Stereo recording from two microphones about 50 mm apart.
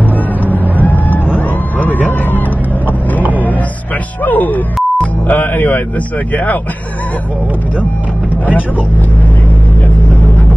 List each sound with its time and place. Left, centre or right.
0.7 s vehicle: left
4.2 s music: left
5.0 s speech: left